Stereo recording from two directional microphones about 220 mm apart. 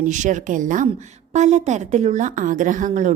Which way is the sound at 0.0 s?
35° right (ahead or behind).